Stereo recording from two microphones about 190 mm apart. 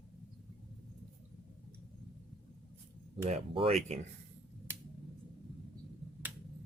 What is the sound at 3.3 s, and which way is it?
Speech, 30° right (ahead or behind).